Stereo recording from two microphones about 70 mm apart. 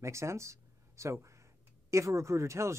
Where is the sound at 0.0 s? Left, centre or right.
Right.